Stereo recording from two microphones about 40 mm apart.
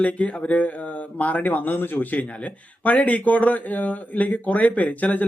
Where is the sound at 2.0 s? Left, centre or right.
Left.